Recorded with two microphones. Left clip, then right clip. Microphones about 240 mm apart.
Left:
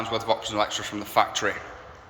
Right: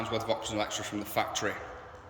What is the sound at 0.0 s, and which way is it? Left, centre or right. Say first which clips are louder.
A man's voice: left 6 dB; centre.